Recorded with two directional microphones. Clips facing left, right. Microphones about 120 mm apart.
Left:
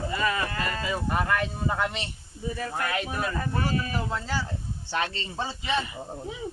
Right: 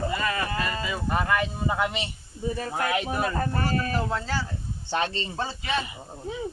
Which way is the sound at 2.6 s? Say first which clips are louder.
Right 2 dB; 35° right (ahead or behind).